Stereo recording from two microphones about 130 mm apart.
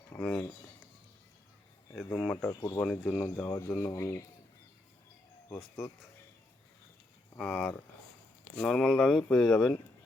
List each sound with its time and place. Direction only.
0.2 s speech: 10° left (ahead or behind)
1.9 s speech: 10° left (ahead or behind)
2.5 s speech: 25° left (ahead or behind)
2.7 s speech: 5° left (ahead or behind)
3.3 s speech: 15° left (ahead or behind)
7.3 s speech: 5° left (ahead or behind)